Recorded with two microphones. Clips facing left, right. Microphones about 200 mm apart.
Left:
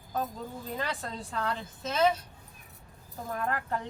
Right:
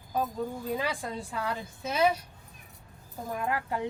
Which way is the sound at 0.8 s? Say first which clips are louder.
Right 2 dB; 10° right (ahead or behind).